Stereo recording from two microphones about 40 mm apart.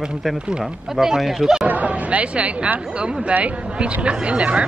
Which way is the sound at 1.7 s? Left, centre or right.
Right.